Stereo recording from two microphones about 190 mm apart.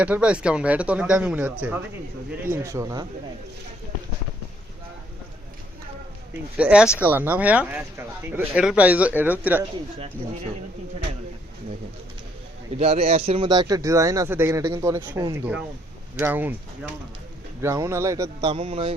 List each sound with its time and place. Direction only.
0.0 s speech: 5° right (ahead or behind)
6.6 s speech: 5° right (ahead or behind)
12.8 s speech: 30° right (ahead or behind); by 16.6 s 10° right (ahead or behind)
17.6 s speech: 15° right (ahead or behind)
18.5 s a sound: 30° right (ahead or behind)